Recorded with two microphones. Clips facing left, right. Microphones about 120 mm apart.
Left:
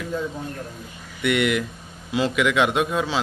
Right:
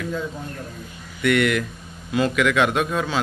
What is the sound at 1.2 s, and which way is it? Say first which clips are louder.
A man's voice: right 2 dB; 20° left (ahead or behind).